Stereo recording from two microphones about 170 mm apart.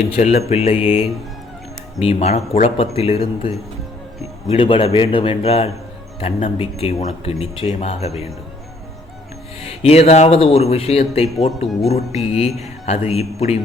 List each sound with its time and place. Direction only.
0.1 s speech: 40° left (ahead or behind)
4.5 s speech: 30° left (ahead or behind)
9.6 s speech: 35° left (ahead or behind)